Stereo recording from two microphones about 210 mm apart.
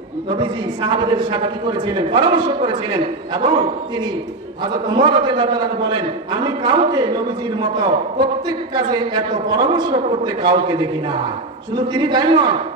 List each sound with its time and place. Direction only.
0.4 s a man's voice: 20° right (ahead or behind)